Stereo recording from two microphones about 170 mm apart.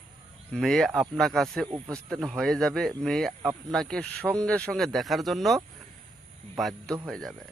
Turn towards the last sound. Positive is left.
turn(degrees=0)  # may be behind; listen again after turning